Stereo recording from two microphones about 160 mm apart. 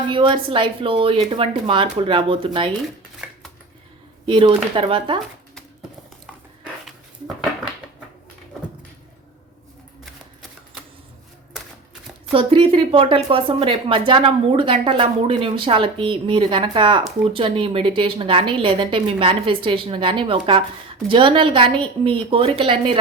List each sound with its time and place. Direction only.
0.1 s a woman's voice: 30° right (ahead or behind)
3.2 s dishes: 5° right (ahead or behind)
4.3 s a woman's voice: 30° right (ahead or behind)
12.3 s a woman's voice: 35° right (ahead or behind)